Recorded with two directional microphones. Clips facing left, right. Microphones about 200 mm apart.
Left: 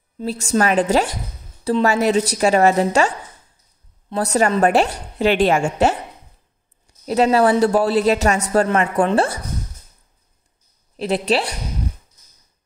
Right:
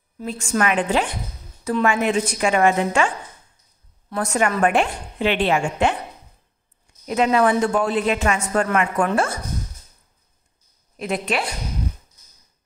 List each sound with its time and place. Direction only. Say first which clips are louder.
0.2 s a woman's voice: left 3 dB; 35° left (ahead or behind)
4.2 s a woman's voice: left 3 dB; 35° left (ahead or behind)
7.1 s a woman's voice: left 3 dB; 35° left (ahead or behind)
11.0 s a woman's voice: left 5 dB; 30° left (ahead or behind)